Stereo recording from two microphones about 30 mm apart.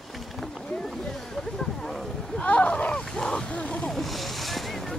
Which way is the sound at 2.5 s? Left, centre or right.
Left.